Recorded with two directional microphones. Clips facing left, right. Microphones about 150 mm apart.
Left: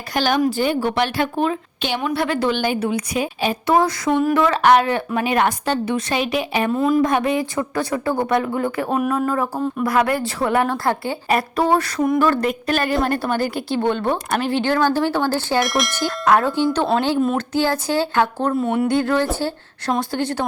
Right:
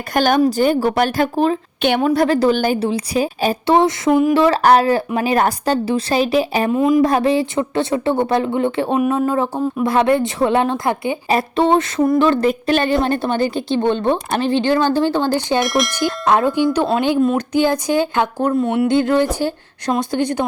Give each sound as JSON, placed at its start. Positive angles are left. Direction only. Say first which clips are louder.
{"t": 0.1, "sound": "a woman's voice", "louder": "right 4 dB", "side_deg": -50}
{"t": 4.1, "sound": "speech", "louder": "right 4 dB", "side_deg": -10}
{"t": 4.4, "sound": "a woman's voice", "louder": "right 2 dB", "side_deg": -35}
{"t": 6.7, "sound": "speech", "louder": "right 2 dB", "side_deg": -15}
{"t": 7.0, "sound": "a woman's voice", "louder": "right 4 dB", "side_deg": -35}
{"t": 15.6, "sound": "speech", "louder": "right 3 dB", "side_deg": 0}
{"t": 15.9, "sound": "a woman's voice", "louder": "right 1 dB", "side_deg": -15}
{"t": 18.5, "sound": "speech", "louder": "right 3 dB", "side_deg": 0}
{"t": 18.9, "sound": "speech", "louder": "right 3 dB", "side_deg": -20}